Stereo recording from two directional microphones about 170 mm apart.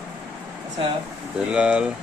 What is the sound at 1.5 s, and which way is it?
Speech, 5° right (ahead or behind).